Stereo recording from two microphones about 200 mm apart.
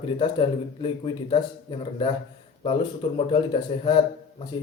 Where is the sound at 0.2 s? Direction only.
25° left (ahead or behind).